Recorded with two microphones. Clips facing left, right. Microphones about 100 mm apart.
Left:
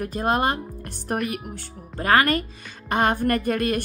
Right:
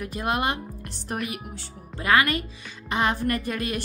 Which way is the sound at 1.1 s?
50° left (ahead or behind).